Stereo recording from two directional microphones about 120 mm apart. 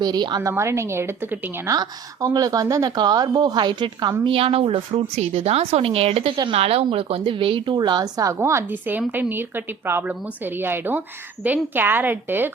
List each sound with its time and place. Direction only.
0.0 s a woman's voice: 35° right (ahead or behind)
0.4 s a woman's voice: 25° right (ahead or behind)
1.7 s a woman's voice: 30° right (ahead or behind)
4.2 s a woman's voice: 50° right (ahead or behind); by 12.5 s 15° right (ahead or behind)